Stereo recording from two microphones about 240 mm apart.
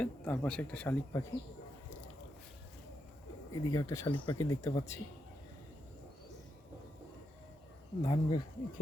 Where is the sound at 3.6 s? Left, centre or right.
Centre.